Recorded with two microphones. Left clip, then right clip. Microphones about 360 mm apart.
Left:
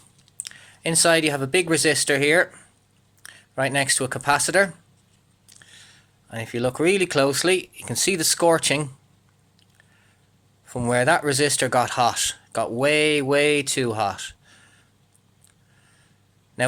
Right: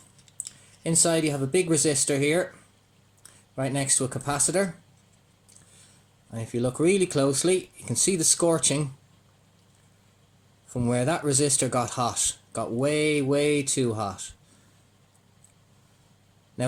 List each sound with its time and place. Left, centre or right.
0.4 s speech: left
6.3 s speech: left
10.7 s speech: left